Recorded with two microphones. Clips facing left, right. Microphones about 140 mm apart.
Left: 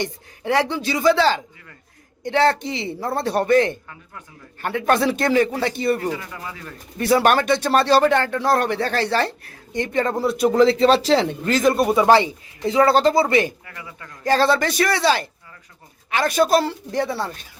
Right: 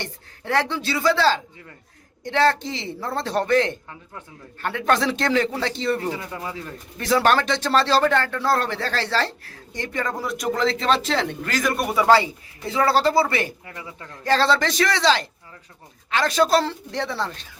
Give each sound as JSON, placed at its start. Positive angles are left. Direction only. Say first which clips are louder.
{"t": 0.0, "sound": "speech", "louder": "left 7 dB", "side_deg": 15}
{"t": 6.3, "sound": "a man's voice", "louder": "right 3 dB", "side_deg": -30}
{"t": 7.0, "sound": "speech", "louder": "left 2 dB", "side_deg": 10}
{"t": 13.7, "sound": "a man's voice", "louder": "right 1 dB", "side_deg": -25}
{"t": 14.3, "sound": "speech", "louder": "left 2 dB", "side_deg": 15}